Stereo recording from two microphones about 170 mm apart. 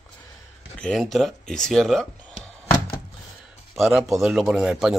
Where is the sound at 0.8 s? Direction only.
5° left (ahead or behind).